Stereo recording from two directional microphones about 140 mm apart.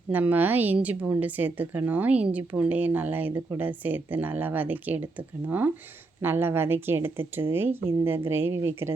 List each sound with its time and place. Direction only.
0.1 s a woman's voice: 15° right (ahead or behind)